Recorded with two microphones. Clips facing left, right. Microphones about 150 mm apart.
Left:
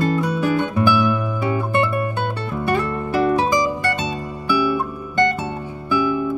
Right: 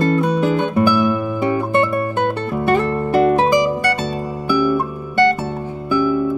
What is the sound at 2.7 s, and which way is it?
Music, 50° right (ahead or behind).